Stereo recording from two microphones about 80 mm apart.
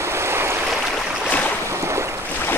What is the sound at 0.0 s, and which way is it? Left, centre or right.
Stream, right.